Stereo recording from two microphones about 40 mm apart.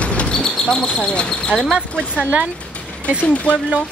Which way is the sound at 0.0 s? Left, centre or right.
Left.